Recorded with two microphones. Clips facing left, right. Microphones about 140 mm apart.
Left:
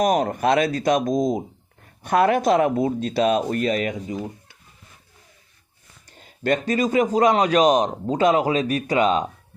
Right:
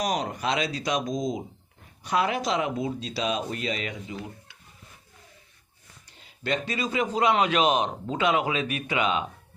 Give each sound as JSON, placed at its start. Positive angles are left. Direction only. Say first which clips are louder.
{"t": 0.0, "sound": "speech", "louder": "left 8 dB", "side_deg": 50}
{"t": 6.1, "sound": "a man's voice", "louder": "left 7 dB", "side_deg": 45}